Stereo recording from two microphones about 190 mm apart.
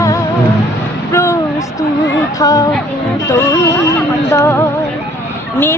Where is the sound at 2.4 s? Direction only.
20° left (ahead or behind).